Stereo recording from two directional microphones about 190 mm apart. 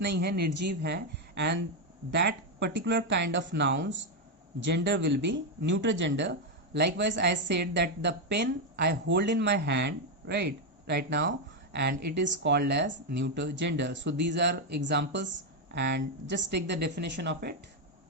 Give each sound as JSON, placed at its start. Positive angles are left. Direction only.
{"t": 0.0, "sound": "speech", "side_deg": -60}